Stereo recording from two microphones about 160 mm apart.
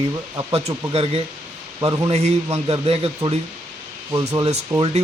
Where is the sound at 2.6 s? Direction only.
35° right (ahead or behind).